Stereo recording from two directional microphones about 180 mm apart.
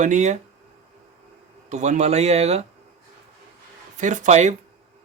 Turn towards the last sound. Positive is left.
turn(degrees=-40)  # may be behind; listen again after turning